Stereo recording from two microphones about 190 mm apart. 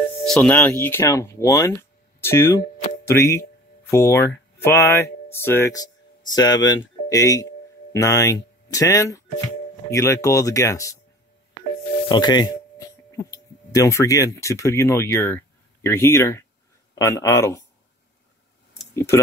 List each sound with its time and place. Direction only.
0.3 s speech: 5° left (ahead or behind)
12.1 s speech: 20° left (ahead or behind)
18.8 s a sound: 15° left (ahead or behind)